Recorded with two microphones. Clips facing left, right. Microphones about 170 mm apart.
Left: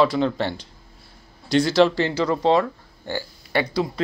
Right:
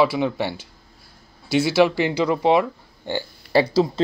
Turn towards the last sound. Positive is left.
turn(degrees=-30)  # may be behind; listen again after turning